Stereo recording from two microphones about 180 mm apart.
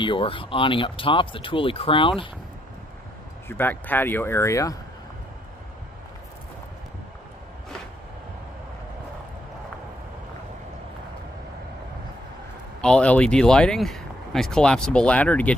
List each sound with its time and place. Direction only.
0.0 s speech: 30° left (ahead or behind)
3.4 s speech: 10° left (ahead or behind)
12.8 s speech: 5° left (ahead or behind)